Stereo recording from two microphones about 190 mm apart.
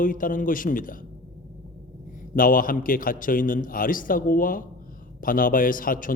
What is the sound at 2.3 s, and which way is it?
A man's voice, 45° left (ahead or behind).